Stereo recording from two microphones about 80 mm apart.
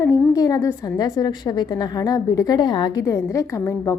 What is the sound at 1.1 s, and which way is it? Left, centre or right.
A woman's voice, left.